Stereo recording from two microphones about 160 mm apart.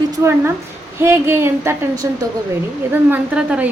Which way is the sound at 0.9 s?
15° right (ahead or behind).